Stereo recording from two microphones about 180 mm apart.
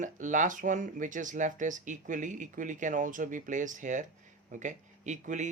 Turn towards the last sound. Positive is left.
turn(degrees=-45)  # may be behind; listen again after turning